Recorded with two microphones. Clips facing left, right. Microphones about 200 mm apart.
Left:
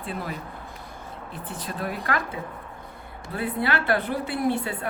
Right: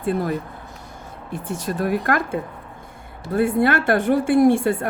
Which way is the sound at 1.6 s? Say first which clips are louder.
Right 8 dB; 50° right (ahead or behind).